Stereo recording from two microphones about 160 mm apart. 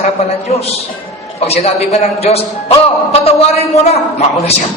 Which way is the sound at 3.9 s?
40° left (ahead or behind).